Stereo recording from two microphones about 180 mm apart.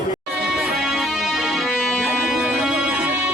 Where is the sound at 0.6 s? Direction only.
Centre (ahead or behind).